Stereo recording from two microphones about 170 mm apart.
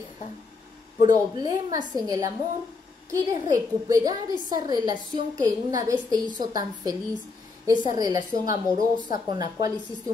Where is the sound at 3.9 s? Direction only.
20° right (ahead or behind).